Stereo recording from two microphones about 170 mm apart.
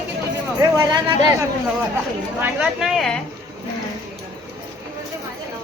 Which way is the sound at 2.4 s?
10° right (ahead or behind).